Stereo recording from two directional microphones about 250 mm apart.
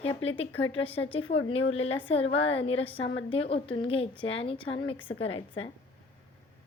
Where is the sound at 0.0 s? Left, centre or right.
Left.